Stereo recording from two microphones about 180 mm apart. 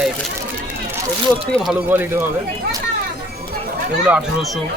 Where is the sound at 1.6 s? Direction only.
5° right (ahead or behind).